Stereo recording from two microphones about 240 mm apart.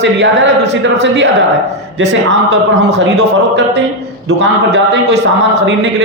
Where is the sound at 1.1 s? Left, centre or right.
Right.